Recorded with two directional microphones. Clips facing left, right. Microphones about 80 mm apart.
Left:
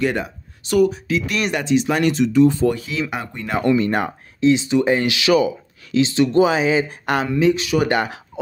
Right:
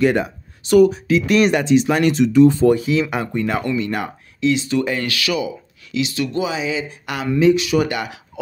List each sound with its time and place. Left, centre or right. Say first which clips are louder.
0.0 s speech: right 4 dB; right
1.9 s speech: right 2 dB; right
3.1 s speech: right 6 dB; centre
3.6 s speech: left 4 dB; left
5.3 s speech: left 10 dB; left
6.4 s speech: left 6 dB; left